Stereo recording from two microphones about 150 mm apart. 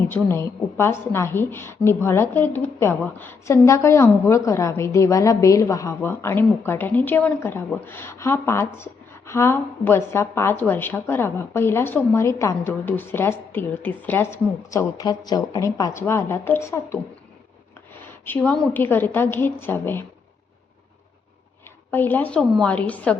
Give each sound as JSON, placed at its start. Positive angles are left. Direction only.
{"t": 0.1, "sound": "a woman's voice", "side_deg": 15}
{"t": 18.3, "sound": "a woman's voice", "side_deg": 10}
{"t": 21.9, "sound": "a woman's voice", "side_deg": 10}